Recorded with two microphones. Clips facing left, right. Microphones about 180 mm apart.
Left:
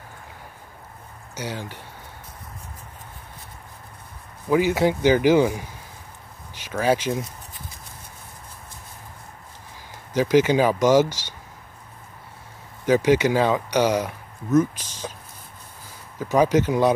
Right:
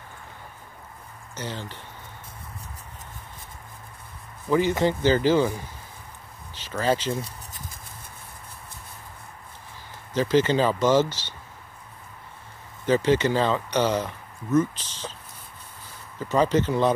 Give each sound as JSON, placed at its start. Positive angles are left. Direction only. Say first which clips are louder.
{"t": 1.3, "sound": "speech", "louder": "left 3 dB", "side_deg": 10}
{"t": 4.5, "sound": "speech", "louder": "left 2 dB", "side_deg": 10}
{"t": 7.2, "sound": "a sound", "louder": "left 2 dB", "side_deg": -35}
{"t": 10.1, "sound": "speech", "louder": "left 3 dB", "side_deg": 10}
{"t": 12.8, "sound": "speech", "louder": "left 3 dB", "side_deg": 10}
{"t": 16.2, "sound": "speech", "louder": "left 3 dB", "side_deg": 10}